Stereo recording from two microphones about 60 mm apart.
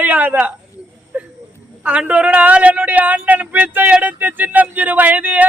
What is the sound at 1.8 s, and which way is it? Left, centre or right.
Speech, right.